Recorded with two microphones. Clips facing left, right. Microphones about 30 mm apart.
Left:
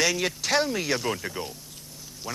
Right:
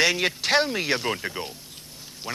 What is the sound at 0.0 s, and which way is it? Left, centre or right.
Speech, right.